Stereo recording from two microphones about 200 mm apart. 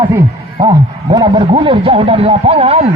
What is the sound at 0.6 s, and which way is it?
A man's voice, 20° right (ahead or behind).